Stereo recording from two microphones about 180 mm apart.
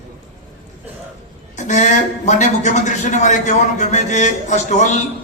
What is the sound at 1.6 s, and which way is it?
A man's voice, 40° left (ahead or behind).